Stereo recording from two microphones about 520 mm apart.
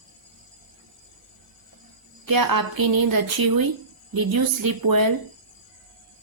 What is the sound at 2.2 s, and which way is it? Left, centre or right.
Speech, right.